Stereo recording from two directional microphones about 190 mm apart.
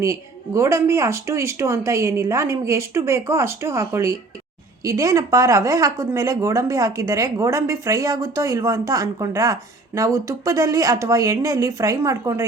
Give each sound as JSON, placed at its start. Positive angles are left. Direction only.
{"t": 0.0, "sound": "speech", "side_deg": -15}